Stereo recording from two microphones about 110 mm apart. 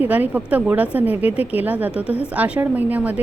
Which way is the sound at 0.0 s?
15° right (ahead or behind).